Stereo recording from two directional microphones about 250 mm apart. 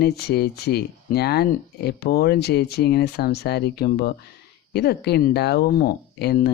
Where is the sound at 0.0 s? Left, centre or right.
Left.